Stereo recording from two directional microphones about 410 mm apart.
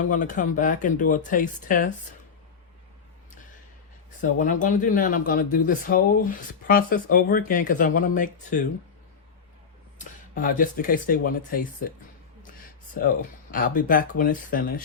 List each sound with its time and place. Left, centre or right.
0.0 s speech: centre
4.2 s speech: centre
10.0 s speech: centre
12.9 s speech: centre